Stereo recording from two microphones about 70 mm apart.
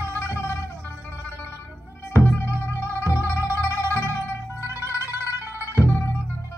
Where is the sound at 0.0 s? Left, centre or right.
Left.